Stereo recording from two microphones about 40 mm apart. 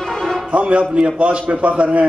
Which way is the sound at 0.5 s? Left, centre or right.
Right.